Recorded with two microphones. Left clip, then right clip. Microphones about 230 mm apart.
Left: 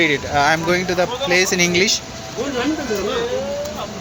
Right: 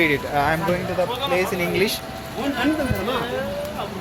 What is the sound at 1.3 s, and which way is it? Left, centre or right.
Speech, left.